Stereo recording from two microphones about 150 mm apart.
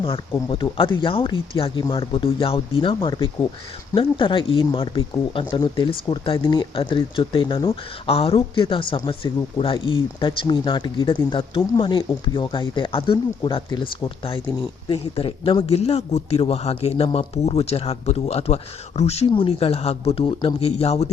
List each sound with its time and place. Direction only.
0.0 s speech: 35° left (ahead or behind)